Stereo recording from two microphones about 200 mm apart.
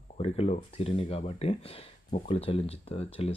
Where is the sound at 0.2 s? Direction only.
30° left (ahead or behind).